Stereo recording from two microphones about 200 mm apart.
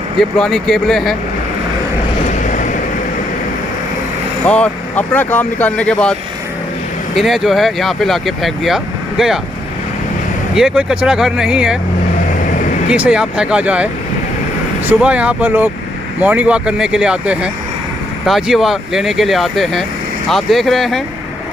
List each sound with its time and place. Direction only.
0.2 s speech: centre (ahead or behind)
2.2 s vehicle: 40° left (ahead or behind)
4.5 s speech: 10° left (ahead or behind)
7.2 s speech: centre (ahead or behind)
10.5 s speech: 5° right (ahead or behind)
12.4 s vehicle: 40° left (ahead or behind)
12.9 s speech: 5° right (ahead or behind)
14.9 s speech: 5° right (ahead or behind)